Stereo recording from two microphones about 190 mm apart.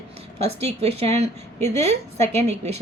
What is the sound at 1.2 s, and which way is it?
A woman's voice, 35° right (ahead or behind).